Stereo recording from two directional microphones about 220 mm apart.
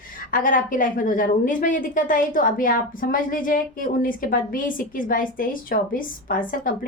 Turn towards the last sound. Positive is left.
turn(degrees=40)  # may be behind; listen again after turning